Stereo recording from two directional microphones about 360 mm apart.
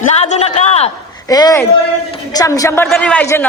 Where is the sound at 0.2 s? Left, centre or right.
Centre.